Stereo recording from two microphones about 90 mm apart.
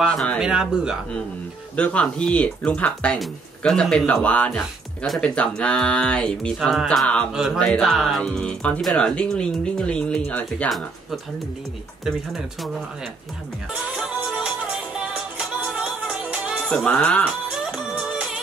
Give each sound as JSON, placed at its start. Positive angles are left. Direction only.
{"t": 0.4, "sound": "speech", "side_deg": -5}
{"t": 1.8, "sound": "speech", "side_deg": 15}
{"t": 5.0, "sound": "speech", "side_deg": 0}
{"t": 5.3, "sound": "speech", "side_deg": 10}
{"t": 7.5, "sound": "speech", "side_deg": 10}
{"t": 7.8, "sound": "speech", "side_deg": 0}
{"t": 12.4, "sound": "speech", "side_deg": 0}
{"t": 14.3, "sound": "music", "side_deg": -5}
{"t": 16.5, "sound": "music", "side_deg": 15}
{"t": 17.3, "sound": "music", "side_deg": -10}